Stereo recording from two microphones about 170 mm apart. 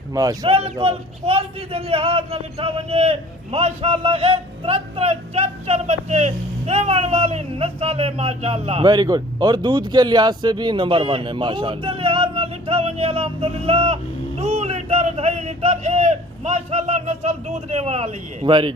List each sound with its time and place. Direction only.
0.1 s speech: 20° right (ahead or behind)
0.4 s a man's voice: 35° right (ahead or behind)
8.8 s a man's voice: 25° right (ahead or behind); by 18.5 s 40° right (ahead or behind)